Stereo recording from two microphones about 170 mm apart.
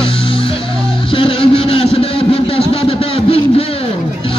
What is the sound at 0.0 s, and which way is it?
Music, 30° left (ahead or behind).